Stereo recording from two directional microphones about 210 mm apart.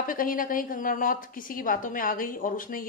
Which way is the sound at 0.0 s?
40° left (ahead or behind).